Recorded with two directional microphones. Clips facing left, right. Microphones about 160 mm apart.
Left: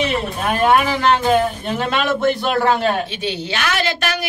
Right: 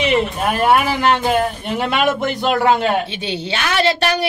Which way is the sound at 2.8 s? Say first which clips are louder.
Right 1 dB; 30° right (ahead or behind).